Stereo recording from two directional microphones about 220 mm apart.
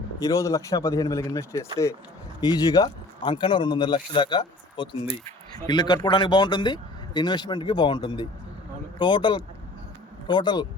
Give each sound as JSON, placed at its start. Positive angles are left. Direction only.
{"t": 0.2, "sound": "a man's voice", "side_deg": 15}